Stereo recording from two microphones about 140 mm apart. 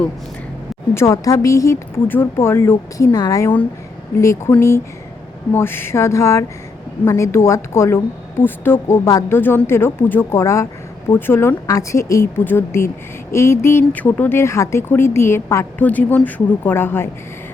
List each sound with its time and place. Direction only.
0.9 s speech: 20° left (ahead or behind)
5.5 s speech: 15° left (ahead or behind)